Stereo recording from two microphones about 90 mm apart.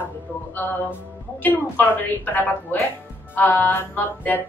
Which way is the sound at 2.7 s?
20° left (ahead or behind).